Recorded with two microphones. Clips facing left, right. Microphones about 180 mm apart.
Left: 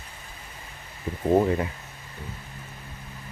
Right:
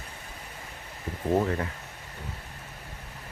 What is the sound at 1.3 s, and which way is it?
Speech, 15° left (ahead or behind).